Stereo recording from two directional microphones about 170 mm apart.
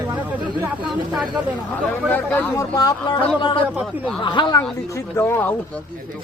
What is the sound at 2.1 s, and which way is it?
Speech, 10° left (ahead or behind).